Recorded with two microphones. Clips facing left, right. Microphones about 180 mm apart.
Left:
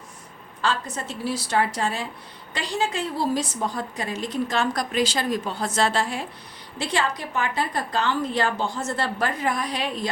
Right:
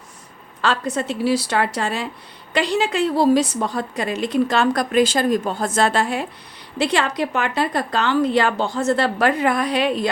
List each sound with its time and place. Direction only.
0.6 s a woman's voice: 70° right (ahead or behind)
6.7 s a woman's voice: 70° right (ahead or behind)